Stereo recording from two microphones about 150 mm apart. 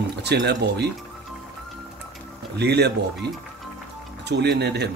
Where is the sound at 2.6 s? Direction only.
90° right.